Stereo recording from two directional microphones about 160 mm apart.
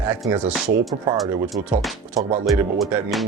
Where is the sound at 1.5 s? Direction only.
20° right (ahead or behind).